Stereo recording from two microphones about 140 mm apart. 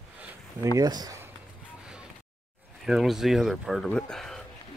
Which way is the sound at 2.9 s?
5° right (ahead or behind).